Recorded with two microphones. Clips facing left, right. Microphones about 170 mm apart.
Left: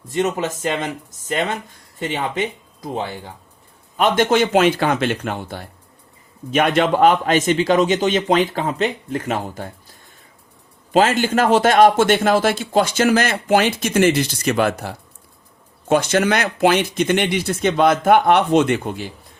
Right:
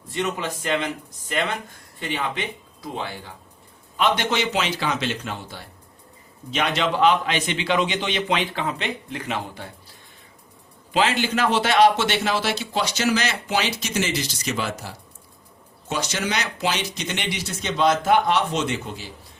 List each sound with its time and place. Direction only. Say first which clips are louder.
0.1 s speech: left 6 dB; 45° left (ahead or behind)
10.9 s speech: left 6 dB; 45° left (ahead or behind)